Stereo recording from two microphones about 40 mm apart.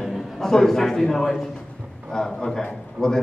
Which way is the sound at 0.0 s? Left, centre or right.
Centre.